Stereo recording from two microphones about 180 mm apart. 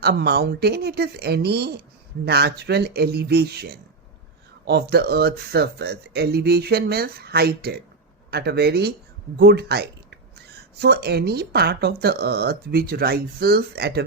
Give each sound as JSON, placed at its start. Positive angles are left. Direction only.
{"t": 0.0, "sound": "speech", "side_deg": -65}